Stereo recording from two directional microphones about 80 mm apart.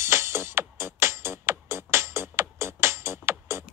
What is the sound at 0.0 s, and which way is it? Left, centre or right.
Music, right.